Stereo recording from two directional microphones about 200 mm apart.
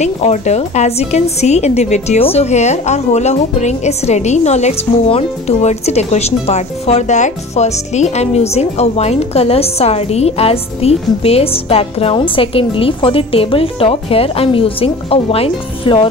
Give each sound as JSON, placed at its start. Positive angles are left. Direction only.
{"t": 0.0, "sound": "a woman's voice", "side_deg": 35}